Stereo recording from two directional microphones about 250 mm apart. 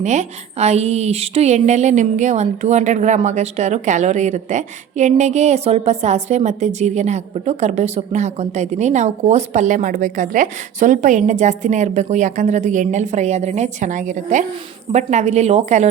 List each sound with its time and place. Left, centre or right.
0.0 s a woman's voice: right